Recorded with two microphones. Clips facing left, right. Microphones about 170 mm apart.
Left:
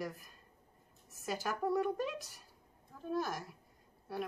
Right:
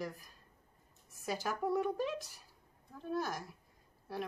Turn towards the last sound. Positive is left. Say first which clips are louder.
# left 1 dB
turn(degrees=0)  # may be behind; listen again after turning